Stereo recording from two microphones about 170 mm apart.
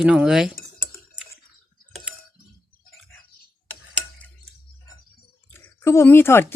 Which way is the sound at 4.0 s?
5° left (ahead or behind).